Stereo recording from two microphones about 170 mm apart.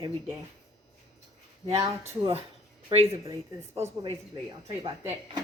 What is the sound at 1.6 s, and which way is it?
Speech, 40° right (ahead or behind).